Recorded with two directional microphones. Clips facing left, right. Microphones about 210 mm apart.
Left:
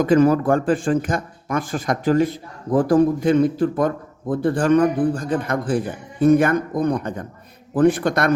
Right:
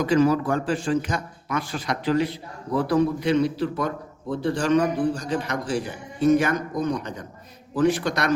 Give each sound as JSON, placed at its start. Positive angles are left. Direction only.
{"t": 0.0, "sound": "a man's voice", "side_deg": 50}